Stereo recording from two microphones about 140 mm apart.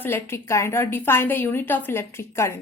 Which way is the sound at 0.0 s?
15° left (ahead or behind).